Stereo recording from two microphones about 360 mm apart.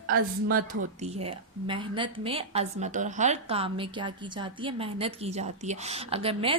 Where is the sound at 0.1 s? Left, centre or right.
Right.